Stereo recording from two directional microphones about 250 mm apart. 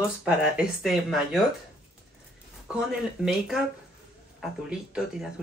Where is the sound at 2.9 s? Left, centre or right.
Centre.